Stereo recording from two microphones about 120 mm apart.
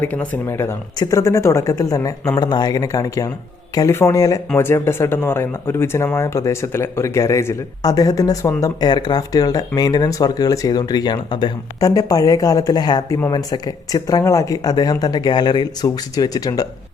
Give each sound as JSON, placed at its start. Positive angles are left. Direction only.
{"t": 0.0, "sound": "speech", "side_deg": 15}